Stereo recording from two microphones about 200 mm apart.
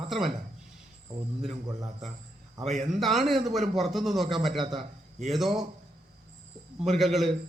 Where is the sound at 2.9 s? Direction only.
Centre (ahead or behind).